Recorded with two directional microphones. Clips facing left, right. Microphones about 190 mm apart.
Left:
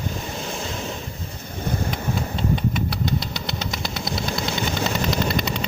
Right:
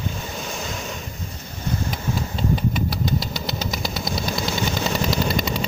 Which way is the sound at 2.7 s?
Centre (ahead or behind).